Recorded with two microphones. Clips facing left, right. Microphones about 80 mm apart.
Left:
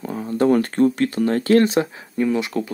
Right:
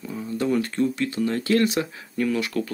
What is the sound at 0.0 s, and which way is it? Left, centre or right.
Speech, left.